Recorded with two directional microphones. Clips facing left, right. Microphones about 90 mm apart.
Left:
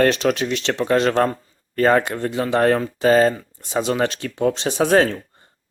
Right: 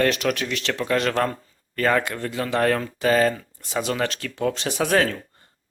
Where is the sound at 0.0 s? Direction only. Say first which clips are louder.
Left 4 dB; 30° left (ahead or behind).